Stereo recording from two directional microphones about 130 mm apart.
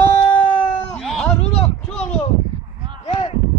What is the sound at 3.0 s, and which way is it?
Speech, 45° left (ahead or behind).